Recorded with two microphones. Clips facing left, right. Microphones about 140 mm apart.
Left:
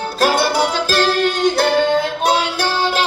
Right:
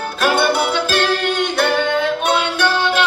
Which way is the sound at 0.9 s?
35° left (ahead or behind).